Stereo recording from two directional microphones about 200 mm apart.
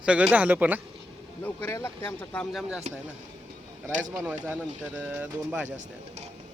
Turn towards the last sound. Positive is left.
turn(degrees=-35)  # may be behind; listen again after turning